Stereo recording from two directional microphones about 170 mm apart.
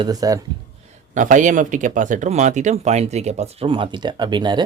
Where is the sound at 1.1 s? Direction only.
50° right (ahead or behind).